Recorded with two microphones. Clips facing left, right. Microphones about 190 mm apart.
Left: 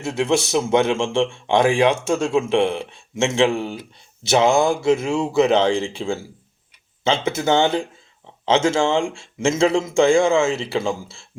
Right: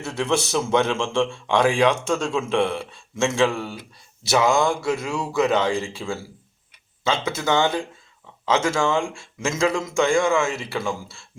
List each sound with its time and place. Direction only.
0.0 s a man's voice: 10° left (ahead or behind)